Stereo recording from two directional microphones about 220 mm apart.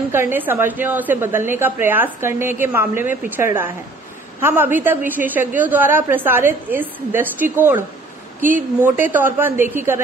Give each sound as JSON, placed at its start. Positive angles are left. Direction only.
{"t": 0.1, "sound": "a woman's voice", "side_deg": -10}
{"t": 8.4, "sound": "speech", "side_deg": -35}
{"t": 8.8, "sound": "a woman's voice", "side_deg": -10}